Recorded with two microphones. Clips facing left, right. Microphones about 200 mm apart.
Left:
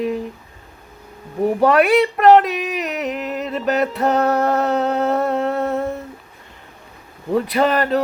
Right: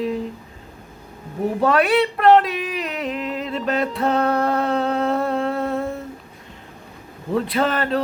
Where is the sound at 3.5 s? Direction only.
5° left (ahead or behind).